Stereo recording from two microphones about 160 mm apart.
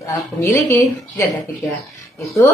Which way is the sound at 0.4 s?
15° left (ahead or behind).